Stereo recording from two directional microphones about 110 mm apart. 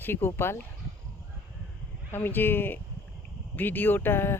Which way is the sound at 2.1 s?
20° left (ahead or behind).